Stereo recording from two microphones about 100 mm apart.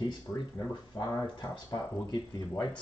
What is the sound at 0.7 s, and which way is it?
Speech, 40° left (ahead or behind).